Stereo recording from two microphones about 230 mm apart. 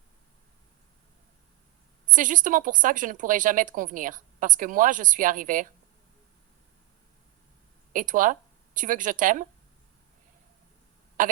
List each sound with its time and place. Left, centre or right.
2.1 s speech: right
7.9 s speech: right
11.2 s throat clearing: right